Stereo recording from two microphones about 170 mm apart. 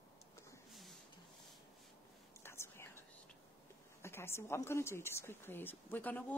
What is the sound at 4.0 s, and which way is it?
A woman's voice, 15° left (ahead or behind).